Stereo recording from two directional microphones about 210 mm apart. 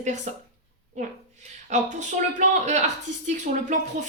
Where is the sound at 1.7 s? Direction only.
35° right (ahead or behind).